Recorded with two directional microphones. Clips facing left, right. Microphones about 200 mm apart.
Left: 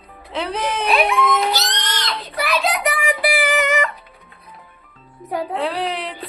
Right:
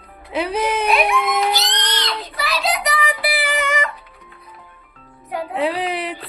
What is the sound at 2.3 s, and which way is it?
Child singing, 55° left (ahead or behind).